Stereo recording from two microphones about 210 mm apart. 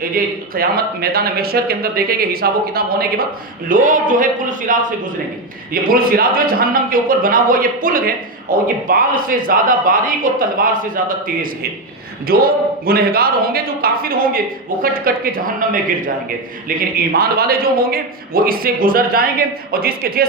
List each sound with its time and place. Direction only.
0.2 s a man's voice: 45° right (ahead or behind)
12.3 s a man's voice: 45° right (ahead or behind)